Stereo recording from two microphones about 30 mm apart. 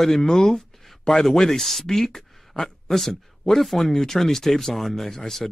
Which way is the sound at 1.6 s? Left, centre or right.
Centre.